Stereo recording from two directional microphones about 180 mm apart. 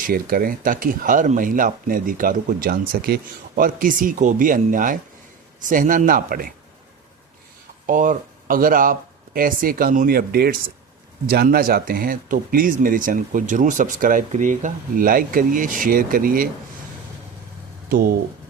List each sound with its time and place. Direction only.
0.1 s speech: 55° right (ahead or behind)
7.9 s speech: 45° right (ahead or behind)